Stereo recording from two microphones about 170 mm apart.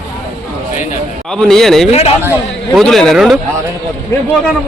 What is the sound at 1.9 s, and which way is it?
Speech, 35° left (ahead or behind).